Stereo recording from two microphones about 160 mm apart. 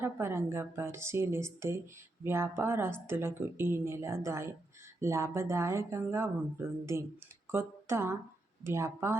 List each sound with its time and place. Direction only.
0.0 s a woman's voice: 15° right (ahead or behind)